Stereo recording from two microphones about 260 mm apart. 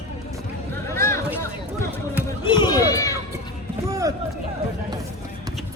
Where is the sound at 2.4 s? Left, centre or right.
Centre.